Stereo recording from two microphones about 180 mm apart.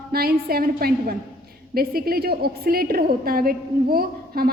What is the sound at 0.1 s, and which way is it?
A woman's voice, 60° right (ahead or behind).